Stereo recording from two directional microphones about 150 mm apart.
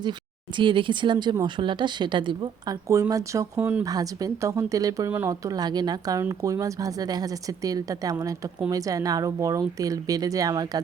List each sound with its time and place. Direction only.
0.5 s speech: 35° right (ahead or behind)
2.9 s a woman's voice: 20° right (ahead or behind)